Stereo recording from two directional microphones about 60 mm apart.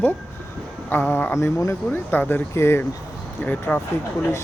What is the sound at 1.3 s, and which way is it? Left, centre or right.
Speech, left.